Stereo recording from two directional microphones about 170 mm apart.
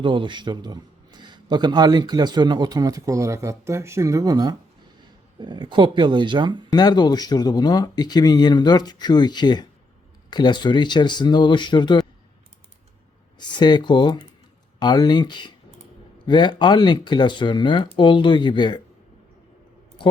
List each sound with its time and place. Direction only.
0.0 s a man's voice: 30° right (ahead or behind)
6.7 s speech: 25° left (ahead or behind)
13.6 s speech: 25° left (ahead or behind)